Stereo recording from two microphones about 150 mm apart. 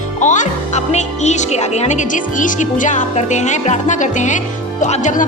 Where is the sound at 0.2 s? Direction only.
55° left (ahead or behind).